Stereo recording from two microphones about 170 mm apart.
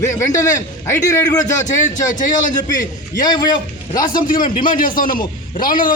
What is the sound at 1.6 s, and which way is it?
Speech, 50° left (ahead or behind).